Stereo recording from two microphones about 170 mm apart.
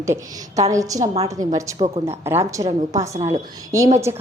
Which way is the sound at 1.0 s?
40° right (ahead or behind).